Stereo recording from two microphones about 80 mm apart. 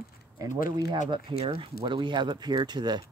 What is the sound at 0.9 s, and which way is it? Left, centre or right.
Speech, right.